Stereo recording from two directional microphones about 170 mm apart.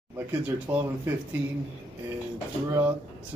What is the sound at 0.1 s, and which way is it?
Speech, 15° right (ahead or behind).